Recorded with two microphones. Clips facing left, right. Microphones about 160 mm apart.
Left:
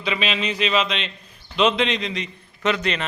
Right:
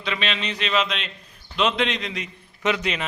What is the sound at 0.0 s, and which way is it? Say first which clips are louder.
A man's voice: left 3 dB; 5° left (ahead or behind).